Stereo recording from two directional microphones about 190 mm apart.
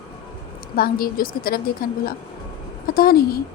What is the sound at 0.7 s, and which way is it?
A woman's voice, 50° left (ahead or behind).